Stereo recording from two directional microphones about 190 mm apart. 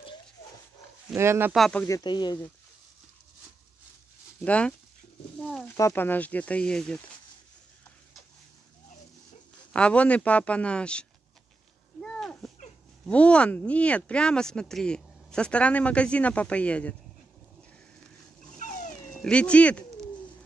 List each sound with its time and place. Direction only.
1.1 s speech: 15° right (ahead or behind)
1.5 s speech: 5° left (ahead or behind)
1.9 s speech: 20° left (ahead or behind)
4.4 s speech: 5° left (ahead or behind)
5.8 s speech: 15° left (ahead or behind)
9.7 s speech: 5° left (ahead or behind)
12.0 s a sound: 5° left (ahead or behind)
13.0 s speech: 5° left (ahead or behind)
18.6 s dog: 40° left (ahead or behind)
19.1 s bird: 5° left (ahead or behind)